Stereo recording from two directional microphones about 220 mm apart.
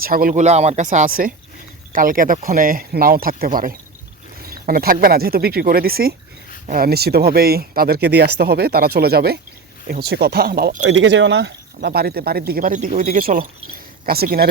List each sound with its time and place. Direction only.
0.0 s speech: 40° right (ahead or behind)
10.8 s speech: 55° right (ahead or behind)